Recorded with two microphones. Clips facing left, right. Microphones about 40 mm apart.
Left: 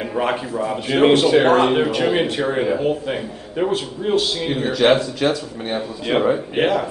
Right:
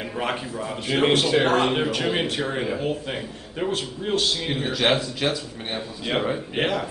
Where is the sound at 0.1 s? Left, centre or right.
Centre.